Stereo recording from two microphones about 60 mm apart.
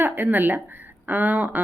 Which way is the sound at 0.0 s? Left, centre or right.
Right.